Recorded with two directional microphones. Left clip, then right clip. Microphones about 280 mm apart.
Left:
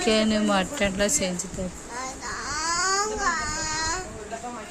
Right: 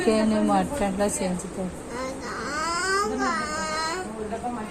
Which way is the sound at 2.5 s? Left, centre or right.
Centre.